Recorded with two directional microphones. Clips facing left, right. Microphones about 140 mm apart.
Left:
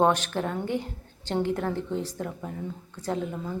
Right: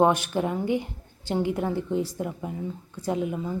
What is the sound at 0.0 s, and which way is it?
A woman's voice, 10° right (ahead or behind).